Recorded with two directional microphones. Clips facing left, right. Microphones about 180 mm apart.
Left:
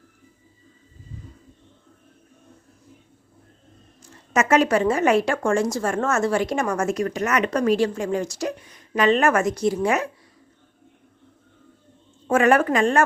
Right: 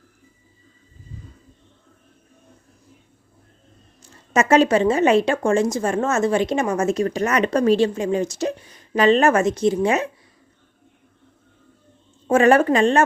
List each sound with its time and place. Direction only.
4.4 s a woman's voice: 30° right (ahead or behind)
12.3 s a woman's voice: 30° right (ahead or behind)